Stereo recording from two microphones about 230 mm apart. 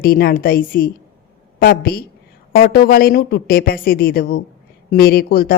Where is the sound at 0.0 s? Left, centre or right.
Left.